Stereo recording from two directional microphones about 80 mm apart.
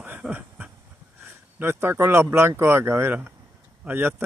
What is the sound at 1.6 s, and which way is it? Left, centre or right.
Speech, right.